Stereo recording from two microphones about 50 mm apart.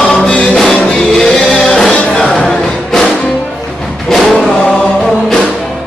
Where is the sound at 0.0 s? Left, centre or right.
Centre.